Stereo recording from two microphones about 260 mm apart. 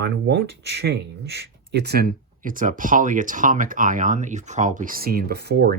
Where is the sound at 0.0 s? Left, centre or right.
Right.